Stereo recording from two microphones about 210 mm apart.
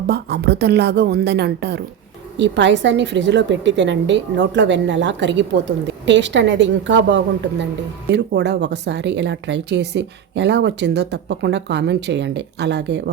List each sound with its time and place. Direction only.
0.1 s speech: 50° right (ahead or behind)